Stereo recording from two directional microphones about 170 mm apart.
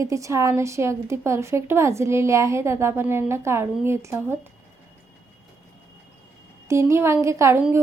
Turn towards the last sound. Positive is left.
turn(degrees=-15)  # may be behind; listen again after turning